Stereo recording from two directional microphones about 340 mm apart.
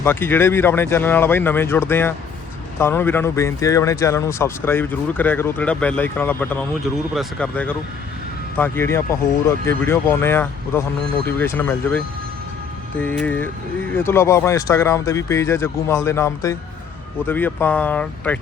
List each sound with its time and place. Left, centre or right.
0.0 s speech: centre